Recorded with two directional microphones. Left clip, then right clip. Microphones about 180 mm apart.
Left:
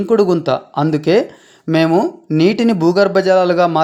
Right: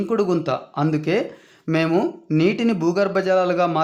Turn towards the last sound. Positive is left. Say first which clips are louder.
# left 6 dB
turn(degrees=20)  # may be behind; listen again after turning